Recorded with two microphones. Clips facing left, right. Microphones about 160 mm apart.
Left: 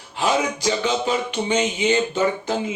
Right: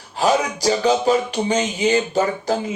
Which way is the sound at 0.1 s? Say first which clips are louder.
Right 3 dB; 40° right (ahead or behind).